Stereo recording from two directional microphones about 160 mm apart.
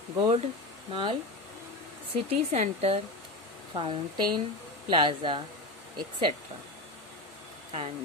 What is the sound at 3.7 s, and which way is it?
A woman's voice, 30° right (ahead or behind).